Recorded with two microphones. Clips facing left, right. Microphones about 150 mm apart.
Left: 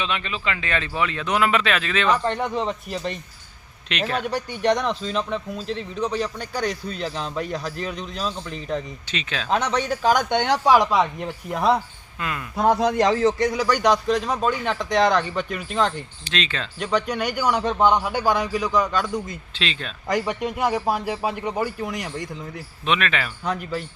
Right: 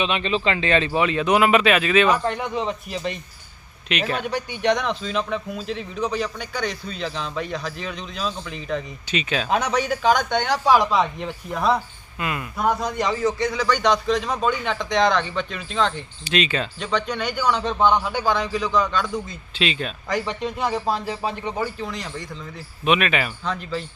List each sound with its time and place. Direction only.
0.0 s speech: 20° right (ahead or behind); by 6.3 s centre (ahead or behind)
6.4 s a man's voice: 35° left (ahead or behind)
7.3 s speech: 5° left (ahead or behind)
8.7 s speech: 10° right (ahead or behind)
10.2 s a man's voice: 20° left (ahead or behind)
12.2 s speech: 10° right (ahead or behind)
12.8 s a man's voice: 85° left
13.6 s a man's voice: 10° left (ahead or behind)
16.2 s speech: 10° right (ahead or behind)
16.8 s a man's voice: 10° left (ahead or behind)
19.5 s speech: 5° right (ahead or behind)
20.1 s a man's voice: 15° left (ahead or behind)
22.9 s speech: 10° right (ahead or behind)
23.5 s a man's voice: 10° left (ahead or behind)